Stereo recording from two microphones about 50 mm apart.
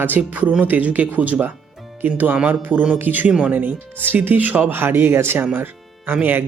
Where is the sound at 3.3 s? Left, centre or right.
Right.